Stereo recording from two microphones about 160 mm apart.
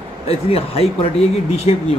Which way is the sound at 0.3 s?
40° left (ahead or behind).